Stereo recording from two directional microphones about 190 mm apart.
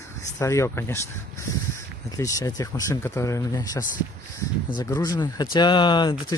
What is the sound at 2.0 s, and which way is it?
Speech, 15° left (ahead or behind).